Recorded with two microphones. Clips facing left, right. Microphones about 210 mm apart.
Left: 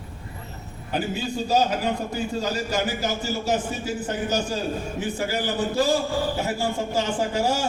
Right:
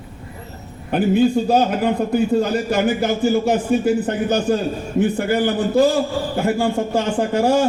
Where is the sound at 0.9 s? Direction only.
55° right (ahead or behind).